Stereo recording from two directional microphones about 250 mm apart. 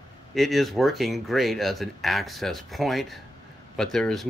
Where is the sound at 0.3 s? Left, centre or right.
Centre.